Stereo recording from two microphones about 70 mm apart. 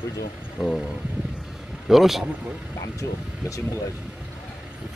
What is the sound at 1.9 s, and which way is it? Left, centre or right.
Speech, centre.